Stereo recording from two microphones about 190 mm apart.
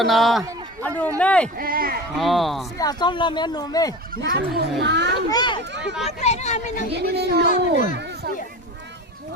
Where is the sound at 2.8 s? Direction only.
20° left (ahead or behind).